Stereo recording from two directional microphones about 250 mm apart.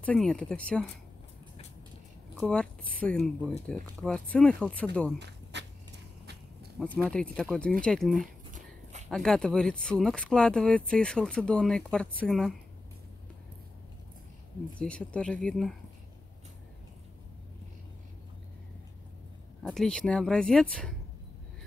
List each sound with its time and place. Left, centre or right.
0.0 s speech: centre
2.3 s speech: centre
5.2 s a sound: right
6.8 s speech: centre
8.2 s a sound: right
9.1 s speech: centre
14.8 s speech: centre
19.6 s speech: centre